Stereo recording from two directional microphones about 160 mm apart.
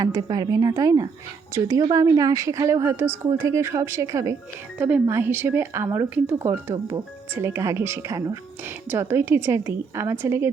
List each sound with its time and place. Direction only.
0.0 s a woman's voice: 25° right (ahead or behind)